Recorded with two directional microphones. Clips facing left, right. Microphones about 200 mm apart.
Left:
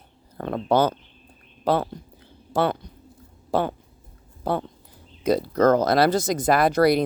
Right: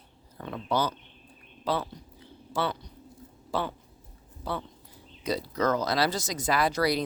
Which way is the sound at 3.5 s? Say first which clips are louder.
Left 8 dB; 50° left (ahead or behind).